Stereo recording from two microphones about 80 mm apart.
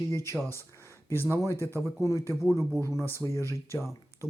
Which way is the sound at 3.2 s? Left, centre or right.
Right.